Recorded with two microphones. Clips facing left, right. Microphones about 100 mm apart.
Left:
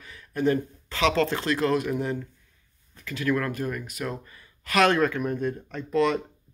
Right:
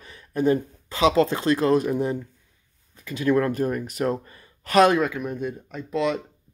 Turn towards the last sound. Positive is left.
turn(degrees=0)  # may be behind; listen again after turning